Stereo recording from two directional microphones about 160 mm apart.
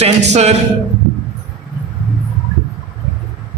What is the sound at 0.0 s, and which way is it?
Speech, 40° right (ahead or behind).